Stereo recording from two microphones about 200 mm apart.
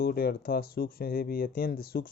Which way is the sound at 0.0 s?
50° left (ahead or behind).